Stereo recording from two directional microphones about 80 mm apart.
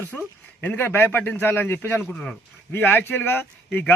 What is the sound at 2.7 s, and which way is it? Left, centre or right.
Speech, left.